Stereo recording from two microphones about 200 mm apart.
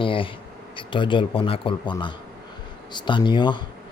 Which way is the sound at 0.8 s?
25° left (ahead or behind).